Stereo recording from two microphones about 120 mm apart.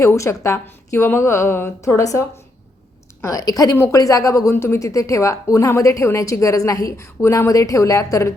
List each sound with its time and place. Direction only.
0.0 s a woman's voice: 25° left (ahead or behind)